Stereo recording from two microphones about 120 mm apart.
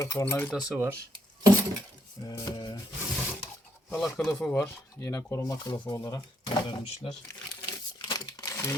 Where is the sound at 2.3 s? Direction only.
35° left (ahead or behind).